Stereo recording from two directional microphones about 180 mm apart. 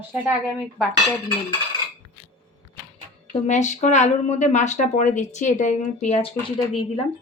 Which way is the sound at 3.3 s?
40° left (ahead or behind).